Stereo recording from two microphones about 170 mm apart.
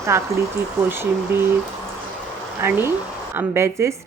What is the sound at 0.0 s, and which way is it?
A woman's voice, 15° right (ahead or behind).